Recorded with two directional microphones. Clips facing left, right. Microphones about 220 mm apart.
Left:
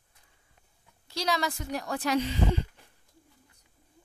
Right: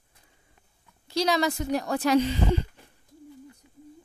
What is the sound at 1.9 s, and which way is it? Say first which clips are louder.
Speech: right 6 dB; 30° right (ahead or behind).